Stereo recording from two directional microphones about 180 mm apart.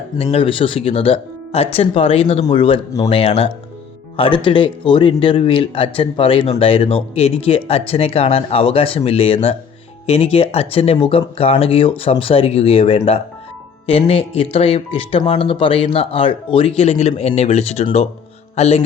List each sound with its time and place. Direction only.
0.2 s speech: 30° left (ahead or behind)